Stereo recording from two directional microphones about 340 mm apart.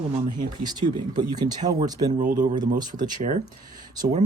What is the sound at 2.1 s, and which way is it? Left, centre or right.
Speech, right.